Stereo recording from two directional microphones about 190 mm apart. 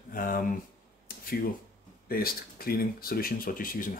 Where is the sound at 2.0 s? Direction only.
50° left (ahead or behind).